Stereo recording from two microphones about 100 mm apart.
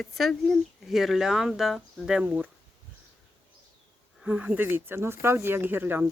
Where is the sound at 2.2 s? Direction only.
15° right (ahead or behind).